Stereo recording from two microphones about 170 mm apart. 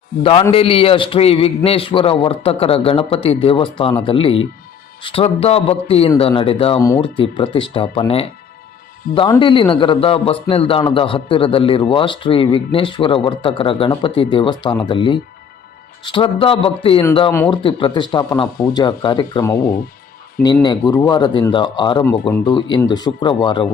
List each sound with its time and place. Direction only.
0.2 s a man's voice: 30° left (ahead or behind)
9.0 s speech: 60° left (ahead or behind)
9.4 s a man's voice: 30° left (ahead or behind)